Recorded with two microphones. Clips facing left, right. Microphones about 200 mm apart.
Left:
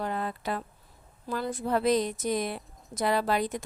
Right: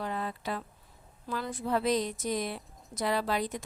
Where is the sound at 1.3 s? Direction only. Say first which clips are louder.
Left 3 dB; 45° left (ahead or behind).